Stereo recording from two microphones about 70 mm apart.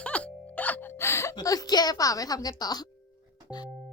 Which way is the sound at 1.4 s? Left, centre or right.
Left.